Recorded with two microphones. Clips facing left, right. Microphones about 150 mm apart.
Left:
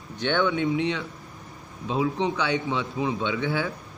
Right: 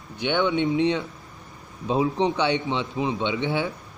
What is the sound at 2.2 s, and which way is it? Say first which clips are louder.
Speech: right 3 dB; 25° right (ahead or behind).